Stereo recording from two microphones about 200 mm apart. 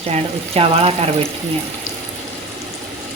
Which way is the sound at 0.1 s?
30° right (ahead or behind).